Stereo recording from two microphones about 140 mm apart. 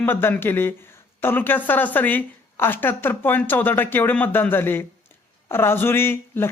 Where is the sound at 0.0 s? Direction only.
15° left (ahead or behind).